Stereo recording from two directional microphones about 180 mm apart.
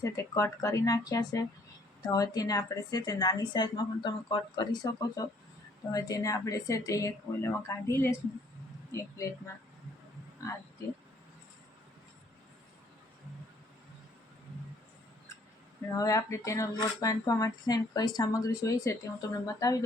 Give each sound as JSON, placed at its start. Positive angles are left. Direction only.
{"t": 0.0, "sound": "speech", "side_deg": 15}
{"t": 15.9, "sound": "speech", "side_deg": 20}